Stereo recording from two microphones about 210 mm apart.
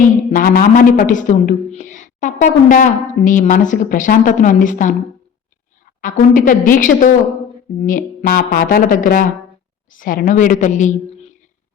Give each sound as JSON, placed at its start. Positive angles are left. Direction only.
{"t": 0.3, "sound": "a man's voice", "side_deg": 40}
{"t": 6.0, "sound": "a man's voice", "side_deg": 40}